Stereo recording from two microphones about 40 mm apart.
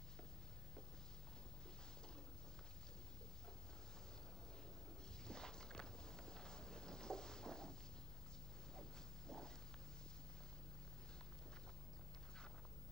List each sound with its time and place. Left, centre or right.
5.2 s walk: centre
9.3 s walk: centre